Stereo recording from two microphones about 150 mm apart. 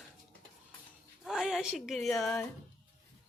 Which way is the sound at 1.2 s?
5° right (ahead or behind).